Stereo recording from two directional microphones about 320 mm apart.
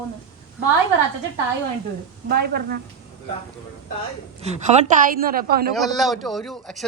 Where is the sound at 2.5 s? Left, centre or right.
Right.